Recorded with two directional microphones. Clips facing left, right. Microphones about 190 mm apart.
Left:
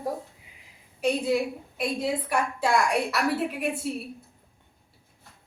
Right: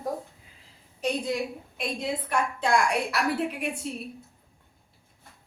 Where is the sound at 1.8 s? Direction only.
5° left (ahead or behind).